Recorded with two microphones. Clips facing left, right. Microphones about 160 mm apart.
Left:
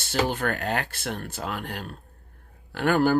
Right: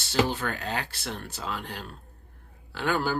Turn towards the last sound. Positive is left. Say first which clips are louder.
# left 6 dB
turn(degrees=55)  # may be behind; listen again after turning